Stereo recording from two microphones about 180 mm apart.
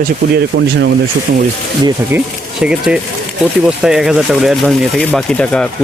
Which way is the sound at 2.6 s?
5° right (ahead or behind).